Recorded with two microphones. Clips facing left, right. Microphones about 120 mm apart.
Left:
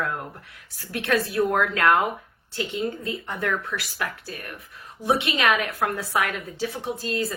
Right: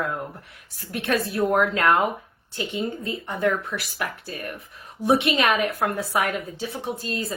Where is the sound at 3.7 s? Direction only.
15° right (ahead or behind).